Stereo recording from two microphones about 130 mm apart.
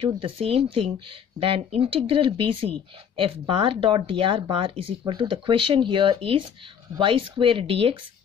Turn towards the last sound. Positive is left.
turn(degrees=-45)  # may be behind; listen again after turning